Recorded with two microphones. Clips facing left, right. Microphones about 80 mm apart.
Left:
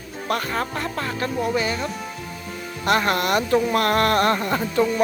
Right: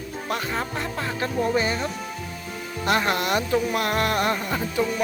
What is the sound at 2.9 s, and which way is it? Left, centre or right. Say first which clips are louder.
Speech: left 3 dB; centre.